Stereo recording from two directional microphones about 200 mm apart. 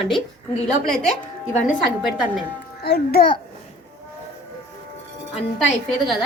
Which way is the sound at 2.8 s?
50° left (ahead or behind).